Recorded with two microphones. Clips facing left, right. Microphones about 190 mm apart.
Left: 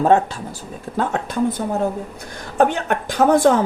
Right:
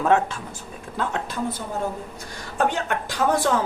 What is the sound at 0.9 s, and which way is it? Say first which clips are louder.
A woman's voice: left 6 dB; 50° left (ahead or behind).